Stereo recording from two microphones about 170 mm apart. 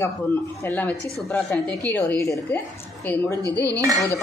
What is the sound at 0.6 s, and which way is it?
A woman's voice, 10° left (ahead or behind).